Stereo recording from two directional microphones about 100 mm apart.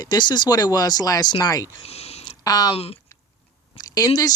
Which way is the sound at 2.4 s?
40° left (ahead or behind).